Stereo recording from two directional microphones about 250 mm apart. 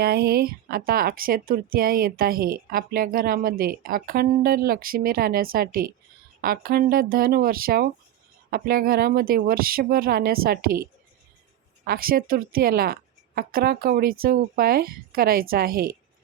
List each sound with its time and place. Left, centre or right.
0.0 s speech: right
11.9 s speech: right